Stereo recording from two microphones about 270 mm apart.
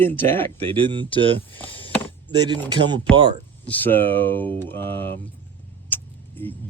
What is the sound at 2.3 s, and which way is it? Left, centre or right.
Speech, centre.